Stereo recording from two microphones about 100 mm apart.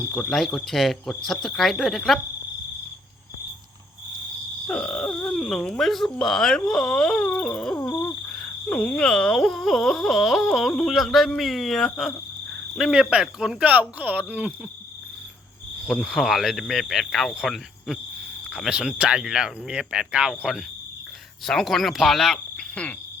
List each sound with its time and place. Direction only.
0.1 s speech: 5° left (ahead or behind)
4.6 s a sound: 10° left (ahead or behind)
6.1 s speech: 5° left (ahead or behind)
7.9 s owl: 20° left (ahead or behind)
8.3 s speech: 10° left (ahead or behind); by 14.5 s 15° right (ahead or behind)
15.9 s speech: centre (ahead or behind)
22.7 s speech: 10° left (ahead or behind)